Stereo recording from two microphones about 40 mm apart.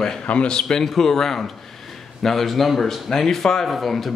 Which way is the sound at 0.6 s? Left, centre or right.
Centre.